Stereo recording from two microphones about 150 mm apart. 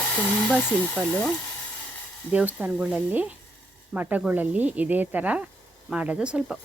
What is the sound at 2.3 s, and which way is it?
Speech, 10° right (ahead or behind).